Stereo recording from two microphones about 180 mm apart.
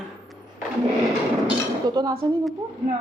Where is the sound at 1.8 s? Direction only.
20° right (ahead or behind).